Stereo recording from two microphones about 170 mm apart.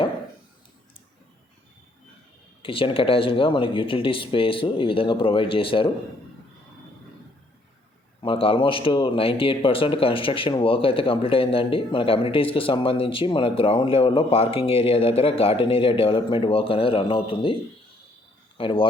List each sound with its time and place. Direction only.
2.6 s speech: 30° left (ahead or behind)
8.2 s speech: 30° left (ahead or behind)